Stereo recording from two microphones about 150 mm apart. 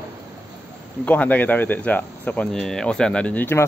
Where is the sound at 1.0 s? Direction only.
10° left (ahead or behind).